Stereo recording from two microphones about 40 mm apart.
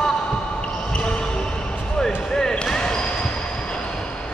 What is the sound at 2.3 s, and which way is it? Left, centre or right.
Basketball bounce, centre.